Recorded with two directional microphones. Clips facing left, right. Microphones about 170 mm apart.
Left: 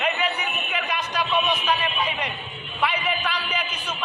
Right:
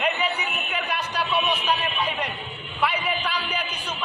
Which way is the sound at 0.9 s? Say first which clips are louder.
Left 2 dB; 10° right (ahead or behind).